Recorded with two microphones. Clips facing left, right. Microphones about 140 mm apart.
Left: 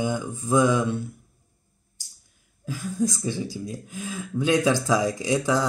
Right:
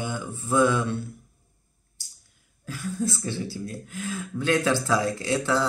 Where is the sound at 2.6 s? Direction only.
15° left (ahead or behind).